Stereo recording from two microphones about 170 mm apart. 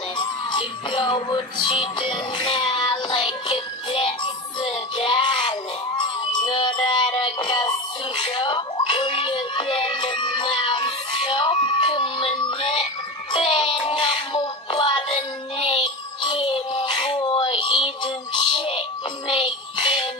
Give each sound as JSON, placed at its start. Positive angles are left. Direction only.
{"t": 0.2, "sound": "music", "side_deg": 25}